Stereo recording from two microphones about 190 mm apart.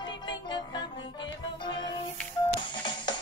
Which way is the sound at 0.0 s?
25° left (ahead or behind).